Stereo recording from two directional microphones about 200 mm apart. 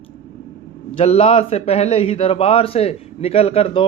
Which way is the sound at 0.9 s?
30° left (ahead or behind).